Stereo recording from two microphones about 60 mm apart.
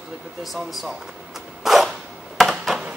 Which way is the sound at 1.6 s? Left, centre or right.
Centre.